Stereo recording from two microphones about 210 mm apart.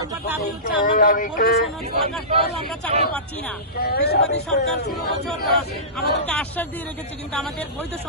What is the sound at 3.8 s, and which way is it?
Speech, 50° left (ahead or behind).